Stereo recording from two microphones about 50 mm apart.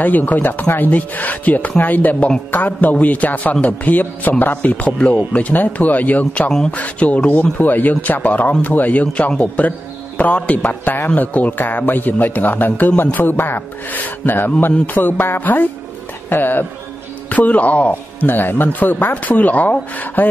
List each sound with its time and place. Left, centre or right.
0.0 s a man's voice: left
2.1 s speech: left
2.5 s a man's voice: left
5.5 s a man's voice: left
14.6 s a sound: left
16.3 s speech: left
17.3 s speech: left
18.3 s a man's voice: left